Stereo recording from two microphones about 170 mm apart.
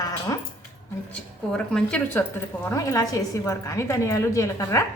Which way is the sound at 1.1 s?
5° left (ahead or behind).